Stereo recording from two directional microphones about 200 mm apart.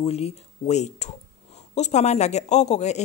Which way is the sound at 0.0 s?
30° left (ahead or behind).